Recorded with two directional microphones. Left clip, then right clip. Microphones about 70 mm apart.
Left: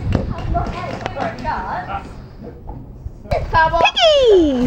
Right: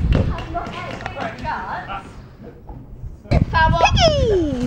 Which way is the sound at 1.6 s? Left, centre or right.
Centre.